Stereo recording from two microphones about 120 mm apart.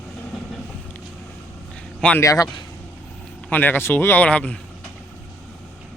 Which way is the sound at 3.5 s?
15° left (ahead or behind).